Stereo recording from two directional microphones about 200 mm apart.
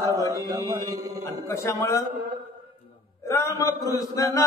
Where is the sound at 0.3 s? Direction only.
20° right (ahead or behind).